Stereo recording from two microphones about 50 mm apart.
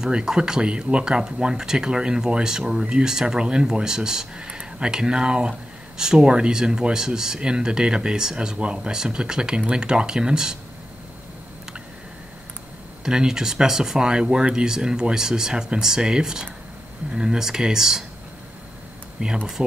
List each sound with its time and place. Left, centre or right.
0.0 s speech: centre
13.0 s speech: centre
19.2 s speech: right